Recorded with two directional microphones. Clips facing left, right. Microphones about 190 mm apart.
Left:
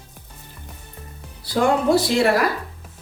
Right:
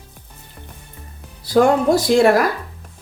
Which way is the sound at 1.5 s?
50° right (ahead or behind).